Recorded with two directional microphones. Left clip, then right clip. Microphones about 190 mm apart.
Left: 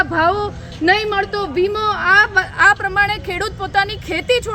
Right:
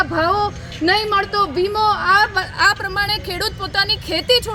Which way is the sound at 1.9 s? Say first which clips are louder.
Left 3 dB; 10° left (ahead or behind).